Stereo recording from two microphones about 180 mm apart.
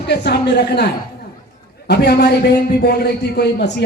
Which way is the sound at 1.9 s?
65° left (ahead or behind).